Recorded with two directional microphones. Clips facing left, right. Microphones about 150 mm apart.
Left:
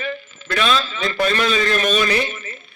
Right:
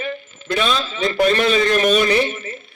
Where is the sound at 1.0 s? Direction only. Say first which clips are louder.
Right 7 dB; 25° right (ahead or behind).